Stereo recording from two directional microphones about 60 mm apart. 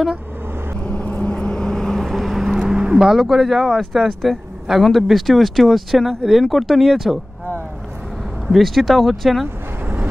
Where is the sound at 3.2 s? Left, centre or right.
Centre.